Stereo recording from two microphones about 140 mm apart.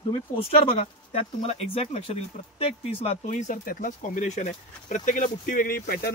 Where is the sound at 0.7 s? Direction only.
45° left (ahead or behind).